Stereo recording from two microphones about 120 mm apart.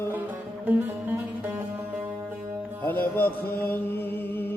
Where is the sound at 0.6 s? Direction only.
15° right (ahead or behind).